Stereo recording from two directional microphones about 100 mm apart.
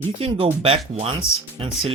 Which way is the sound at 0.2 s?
65° right (ahead or behind).